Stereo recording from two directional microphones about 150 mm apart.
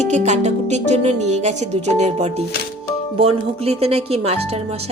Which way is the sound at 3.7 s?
45° right (ahead or behind).